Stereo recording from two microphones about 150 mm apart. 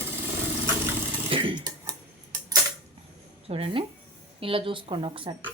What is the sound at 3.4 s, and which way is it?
Speech, 40° right (ahead or behind).